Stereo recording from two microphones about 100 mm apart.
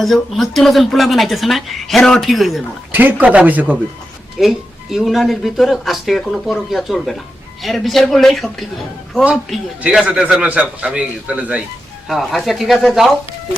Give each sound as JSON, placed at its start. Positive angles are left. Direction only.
{"t": 0.0, "sound": "speech", "side_deg": 0}
{"t": 2.9, "sound": "a man's voice", "side_deg": -15}
{"t": 4.4, "sound": "speech", "side_deg": -5}
{"t": 9.8, "sound": "a man's voice", "side_deg": -10}
{"t": 12.0, "sound": "speech", "side_deg": 0}